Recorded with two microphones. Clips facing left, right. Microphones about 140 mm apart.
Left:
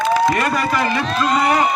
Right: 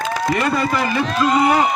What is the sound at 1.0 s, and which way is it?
Speech, 15° right (ahead or behind).